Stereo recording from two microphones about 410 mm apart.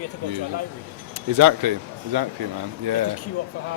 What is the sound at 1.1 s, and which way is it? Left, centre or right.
Speech, right.